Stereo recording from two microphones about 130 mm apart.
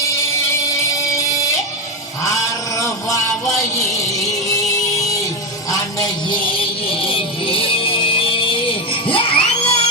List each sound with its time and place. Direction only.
0.0 s music: 25° left (ahead or behind)
2.2 s a sound: 25° left (ahead or behind)
4.2 s music: 25° left (ahead or behind)
6.6 s music: 45° left (ahead or behind)